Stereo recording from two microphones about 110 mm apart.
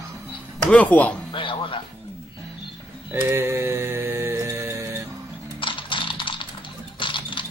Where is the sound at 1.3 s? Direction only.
50° left (ahead or behind).